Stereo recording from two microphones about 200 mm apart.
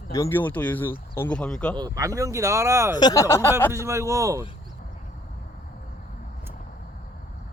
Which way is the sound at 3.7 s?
15° right (ahead or behind).